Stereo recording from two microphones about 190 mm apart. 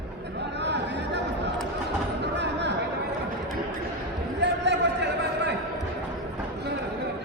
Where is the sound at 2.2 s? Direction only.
65° right (ahead or behind).